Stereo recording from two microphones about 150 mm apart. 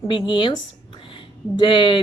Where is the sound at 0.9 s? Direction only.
35° left (ahead or behind).